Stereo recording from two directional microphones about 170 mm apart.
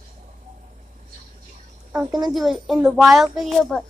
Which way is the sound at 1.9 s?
25° right (ahead or behind).